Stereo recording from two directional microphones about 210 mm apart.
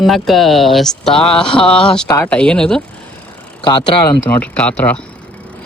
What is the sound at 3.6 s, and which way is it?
Speech, 25° left (ahead or behind).